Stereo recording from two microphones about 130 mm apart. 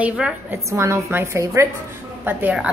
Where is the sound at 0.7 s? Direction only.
20° right (ahead or behind).